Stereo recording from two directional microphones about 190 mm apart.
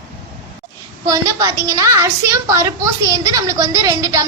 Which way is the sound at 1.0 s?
20° right (ahead or behind).